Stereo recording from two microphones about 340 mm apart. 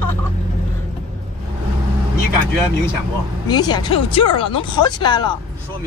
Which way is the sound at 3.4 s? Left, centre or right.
Centre.